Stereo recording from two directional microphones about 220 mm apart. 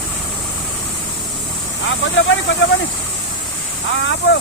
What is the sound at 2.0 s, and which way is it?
Speech, 55° left (ahead or behind).